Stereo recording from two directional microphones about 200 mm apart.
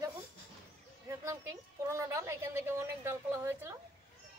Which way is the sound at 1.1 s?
15° right (ahead or behind).